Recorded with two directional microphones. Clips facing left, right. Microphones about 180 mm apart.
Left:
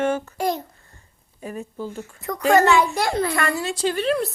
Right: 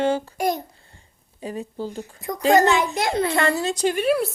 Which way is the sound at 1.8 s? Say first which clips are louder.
Right 1 dB; 35° right (ahead or behind).